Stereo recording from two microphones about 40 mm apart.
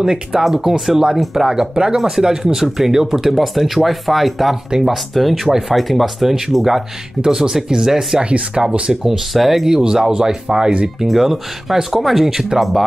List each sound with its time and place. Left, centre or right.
0.0 s speech: centre
9.1 s speech: centre
11.1 s speech: centre